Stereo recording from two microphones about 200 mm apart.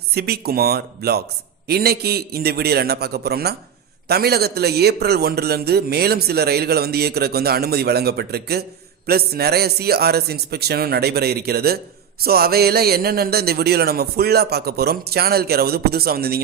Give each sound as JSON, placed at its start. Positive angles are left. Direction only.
{"t": 0.1, "sound": "a man's voice", "side_deg": -50}